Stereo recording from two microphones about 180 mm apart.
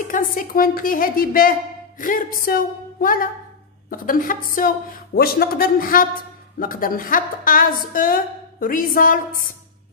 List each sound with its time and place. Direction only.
0.1 s a woman's voice: 50° left (ahead or behind)